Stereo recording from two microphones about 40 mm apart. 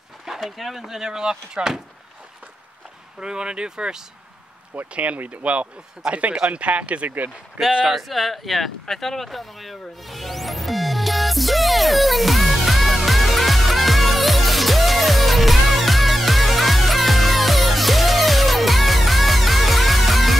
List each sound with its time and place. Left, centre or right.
0.2 s speech: centre
1.6 s speech: right
3.2 s speech: right
4.9 s speech: right
7.9 s a sound: centre